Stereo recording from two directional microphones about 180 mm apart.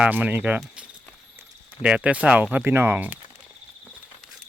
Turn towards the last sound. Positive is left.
turn(degrees=-10)  # may be behind; listen again after turning